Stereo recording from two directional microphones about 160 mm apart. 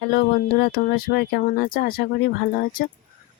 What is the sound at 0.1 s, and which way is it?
Speech, 75° left (ahead or behind).